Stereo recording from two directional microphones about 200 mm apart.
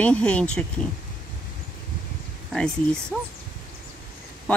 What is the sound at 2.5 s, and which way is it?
Speech, 5° left (ahead or behind).